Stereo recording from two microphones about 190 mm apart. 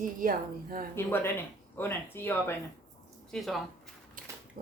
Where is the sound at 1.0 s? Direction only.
10° left (ahead or behind).